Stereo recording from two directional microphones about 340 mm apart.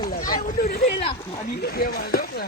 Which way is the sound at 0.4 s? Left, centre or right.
Left.